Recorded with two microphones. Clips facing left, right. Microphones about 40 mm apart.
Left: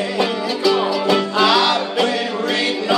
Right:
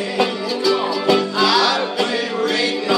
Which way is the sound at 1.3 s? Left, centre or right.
Left.